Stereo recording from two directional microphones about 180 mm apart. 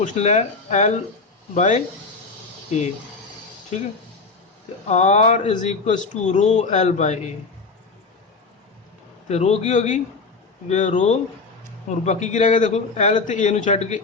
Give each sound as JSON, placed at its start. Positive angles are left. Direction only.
{"t": 0.0, "sound": "speech", "side_deg": 40}
{"t": 4.9, "sound": "speech", "side_deg": 40}
{"t": 9.3, "sound": "a man's voice", "side_deg": 40}